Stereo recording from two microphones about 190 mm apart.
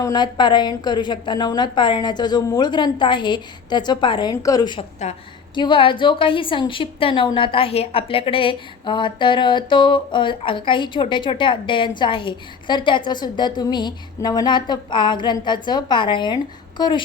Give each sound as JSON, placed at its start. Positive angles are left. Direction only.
{"t": 0.0, "sound": "a woman's voice", "side_deg": 20}